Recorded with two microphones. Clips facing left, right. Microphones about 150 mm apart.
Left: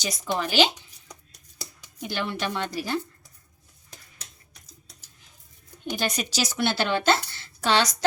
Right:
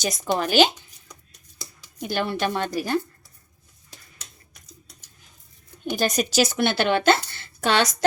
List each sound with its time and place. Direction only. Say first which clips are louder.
0.0 s a woman's voice: right 4 dB; 50° right (ahead or behind)
2.0 s a woman's voice: right 5 dB; 45° right (ahead or behind)
5.8 s speech: right 5 dB; 45° right (ahead or behind)